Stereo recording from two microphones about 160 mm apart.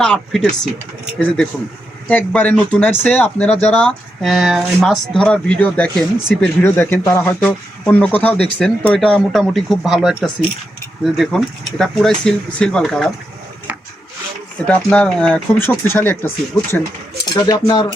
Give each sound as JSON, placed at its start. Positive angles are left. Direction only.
{"t": 0.0, "sound": "speech", "side_deg": 5}
{"t": 2.0, "sound": "speech", "side_deg": 10}
{"t": 14.8, "sound": "speech", "side_deg": 5}